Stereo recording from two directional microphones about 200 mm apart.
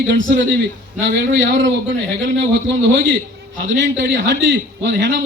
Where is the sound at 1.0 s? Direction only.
70° right (ahead or behind).